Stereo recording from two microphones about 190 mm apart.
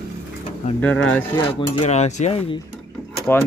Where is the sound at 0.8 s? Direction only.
5° left (ahead or behind).